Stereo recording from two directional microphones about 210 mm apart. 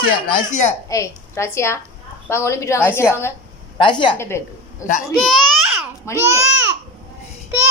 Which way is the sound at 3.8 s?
25° left (ahead or behind).